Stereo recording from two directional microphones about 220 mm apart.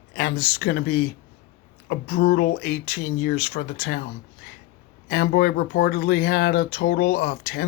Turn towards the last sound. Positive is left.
turn(degrees=40)  # may be behind; listen again after turning